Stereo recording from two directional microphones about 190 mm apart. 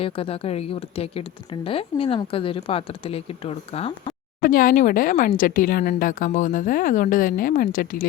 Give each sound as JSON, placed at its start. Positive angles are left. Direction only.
{"t": 0.0, "sound": "a woman's voice", "side_deg": 30}
{"t": 4.4, "sound": "a woman's voice", "side_deg": 50}